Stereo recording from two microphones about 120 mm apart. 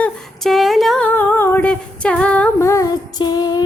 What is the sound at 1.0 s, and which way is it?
Humming, 15° left (ahead or behind).